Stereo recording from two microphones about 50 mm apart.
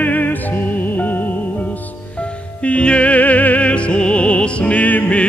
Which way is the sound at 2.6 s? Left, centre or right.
Left.